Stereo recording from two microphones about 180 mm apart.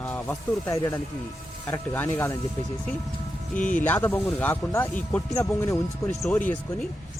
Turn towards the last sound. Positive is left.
turn(degrees=10)  # may be behind; listen again after turning